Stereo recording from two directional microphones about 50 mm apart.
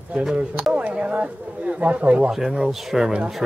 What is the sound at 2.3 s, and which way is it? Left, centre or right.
Speech, centre.